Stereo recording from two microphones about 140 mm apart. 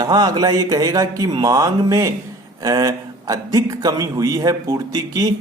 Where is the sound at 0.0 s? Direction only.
30° right (ahead or behind).